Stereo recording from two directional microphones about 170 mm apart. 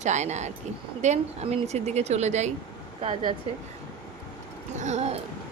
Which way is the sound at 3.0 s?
30° right (ahead or behind).